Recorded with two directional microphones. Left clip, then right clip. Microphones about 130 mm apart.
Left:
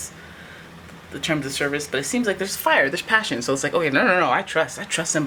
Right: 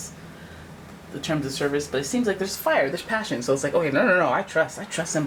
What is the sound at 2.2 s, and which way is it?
Speech, 35° left (ahead or behind).